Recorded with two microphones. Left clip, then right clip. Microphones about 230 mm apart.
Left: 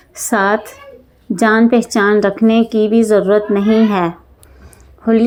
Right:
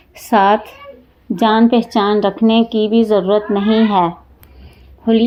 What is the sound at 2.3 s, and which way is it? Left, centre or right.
Speech, left.